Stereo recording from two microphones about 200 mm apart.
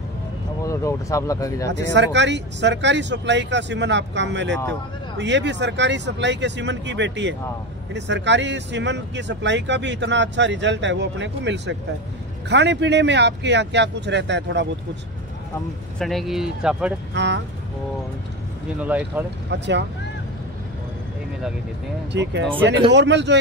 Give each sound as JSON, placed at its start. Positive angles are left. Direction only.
{"t": 0.7, "sound": "speech", "side_deg": 15}
{"t": 1.9, "sound": "speech", "side_deg": -60}
{"t": 16.0, "sound": "speech", "side_deg": 0}
{"t": 17.1, "sound": "speech", "side_deg": -65}
{"t": 18.8, "sound": "speech", "side_deg": -5}
{"t": 19.5, "sound": "speech", "side_deg": -60}
{"t": 22.1, "sound": "speech", "side_deg": -60}